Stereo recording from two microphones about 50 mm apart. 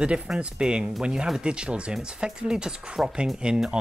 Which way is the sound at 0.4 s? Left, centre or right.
Centre.